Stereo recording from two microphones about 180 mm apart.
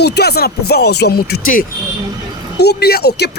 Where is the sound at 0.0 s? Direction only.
65° left (ahead or behind).